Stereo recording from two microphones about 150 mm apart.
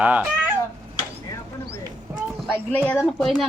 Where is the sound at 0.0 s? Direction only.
10° right (ahead or behind).